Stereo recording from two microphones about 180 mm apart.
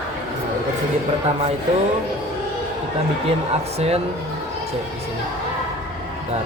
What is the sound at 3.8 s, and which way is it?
Speech, 35° right (ahead or behind).